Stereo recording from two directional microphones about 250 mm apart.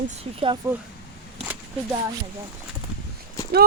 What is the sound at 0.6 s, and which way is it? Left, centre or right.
Speech, centre.